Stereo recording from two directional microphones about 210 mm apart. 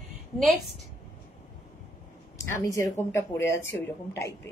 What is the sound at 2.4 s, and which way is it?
A woman's voice, 15° left (ahead or behind).